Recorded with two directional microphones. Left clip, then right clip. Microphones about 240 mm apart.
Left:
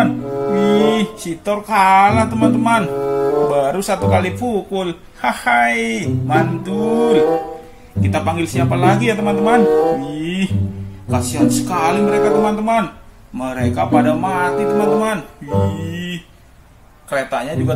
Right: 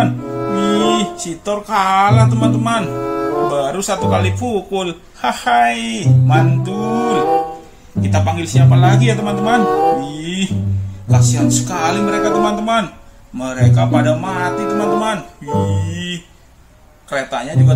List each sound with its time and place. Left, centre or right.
0.0 s music: centre
8.1 s speech: centre
17.1 s speech: centre